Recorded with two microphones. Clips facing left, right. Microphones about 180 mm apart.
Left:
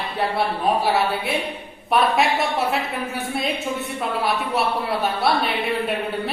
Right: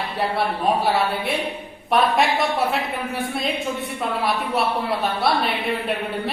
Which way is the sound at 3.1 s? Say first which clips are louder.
Even; centre (ahead or behind).